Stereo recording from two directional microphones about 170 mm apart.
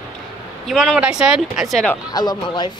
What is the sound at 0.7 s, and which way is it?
Speech, centre (ahead or behind).